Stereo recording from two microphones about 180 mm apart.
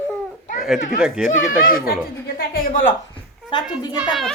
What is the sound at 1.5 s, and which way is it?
Speech, 50° left (ahead or behind).